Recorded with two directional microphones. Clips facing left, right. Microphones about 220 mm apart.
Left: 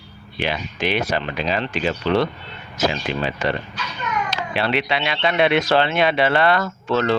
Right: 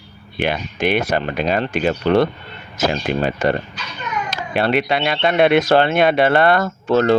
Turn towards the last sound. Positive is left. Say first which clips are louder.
# right 5 dB
turn(degrees=-45)  # may be behind; listen again after turning